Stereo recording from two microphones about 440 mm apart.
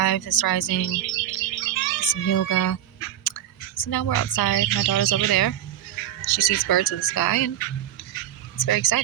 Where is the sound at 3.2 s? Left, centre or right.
Left.